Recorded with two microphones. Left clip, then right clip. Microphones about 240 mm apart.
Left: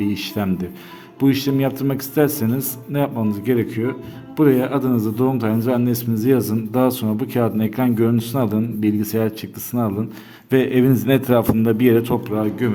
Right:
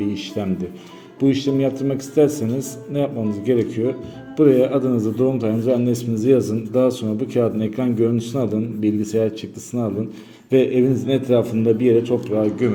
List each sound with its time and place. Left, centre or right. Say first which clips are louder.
0.0 s a man's voice: left 1 dB; left